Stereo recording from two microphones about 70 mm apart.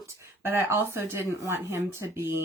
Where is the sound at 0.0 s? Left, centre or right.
Right.